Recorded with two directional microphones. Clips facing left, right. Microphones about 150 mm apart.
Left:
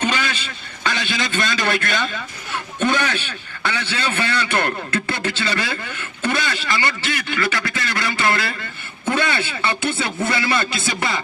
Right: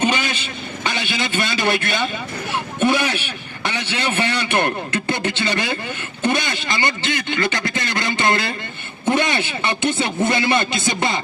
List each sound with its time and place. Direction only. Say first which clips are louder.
0.0 s vehicle: right 2 dB; 15° right (ahead or behind)
0.9 s a man's voice: left 1 dB; 15° right (ahead or behind)